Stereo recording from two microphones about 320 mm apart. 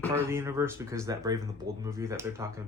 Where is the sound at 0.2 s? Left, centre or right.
Centre.